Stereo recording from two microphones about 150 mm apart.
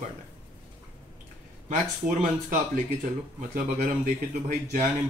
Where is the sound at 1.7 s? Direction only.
60° right (ahead or behind).